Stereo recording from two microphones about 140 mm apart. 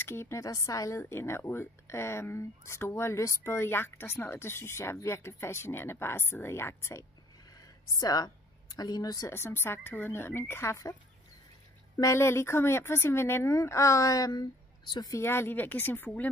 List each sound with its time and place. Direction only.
0.0 s speech: 15° left (ahead or behind)
12.0 s speech: 20° left (ahead or behind)